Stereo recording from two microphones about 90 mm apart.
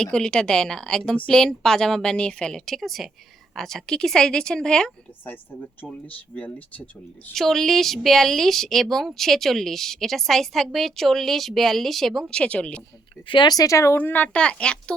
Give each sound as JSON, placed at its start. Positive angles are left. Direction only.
{"t": 0.0, "sound": "speech", "side_deg": 10}
{"t": 5.2, "sound": "speech", "side_deg": 20}
{"t": 7.3, "sound": "speech", "side_deg": 5}
{"t": 12.3, "sound": "speech", "side_deg": 15}
{"t": 13.2, "sound": "speech", "side_deg": 60}
{"t": 13.6, "sound": "speech", "side_deg": 35}
{"t": 14.0, "sound": "speech", "side_deg": 20}